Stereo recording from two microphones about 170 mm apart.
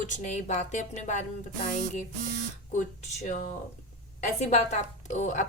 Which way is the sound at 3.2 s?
40° left (ahead or behind).